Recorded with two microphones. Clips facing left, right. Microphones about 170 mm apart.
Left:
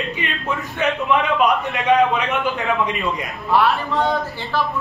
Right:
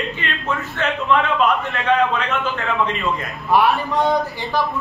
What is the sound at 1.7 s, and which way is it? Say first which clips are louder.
Speech: left 2 dB; 15° left (ahead or behind).